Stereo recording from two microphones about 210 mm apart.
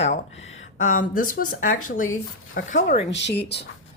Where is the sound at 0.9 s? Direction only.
40° left (ahead or behind).